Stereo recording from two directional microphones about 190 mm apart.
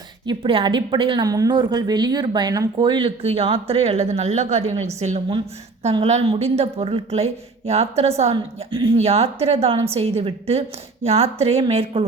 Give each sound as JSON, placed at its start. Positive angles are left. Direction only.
{"t": 0.3, "sound": "a woman's voice", "side_deg": -25}